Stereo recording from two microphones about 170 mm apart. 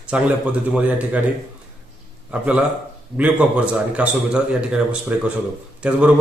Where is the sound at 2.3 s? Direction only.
5° right (ahead or behind).